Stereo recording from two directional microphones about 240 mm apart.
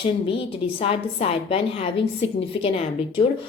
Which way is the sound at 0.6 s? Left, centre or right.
Left.